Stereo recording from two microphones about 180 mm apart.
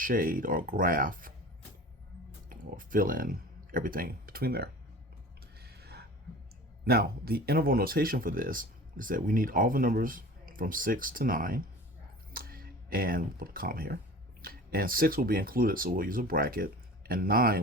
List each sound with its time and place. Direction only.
0.0 s speech: 50° right (ahead or behind)
2.5 s speech: 50° right (ahead or behind)
5.5 s a sound: 60° right (ahead or behind)
6.8 s speech: 55° right (ahead or behind)